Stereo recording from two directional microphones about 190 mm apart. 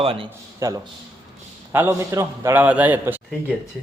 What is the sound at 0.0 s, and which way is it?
Speech, 30° right (ahead or behind).